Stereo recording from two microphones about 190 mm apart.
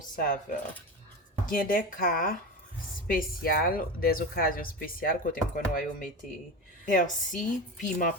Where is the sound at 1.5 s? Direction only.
45° left (ahead or behind).